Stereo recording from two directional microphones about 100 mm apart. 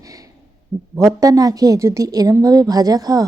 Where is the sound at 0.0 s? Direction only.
35° right (ahead or behind).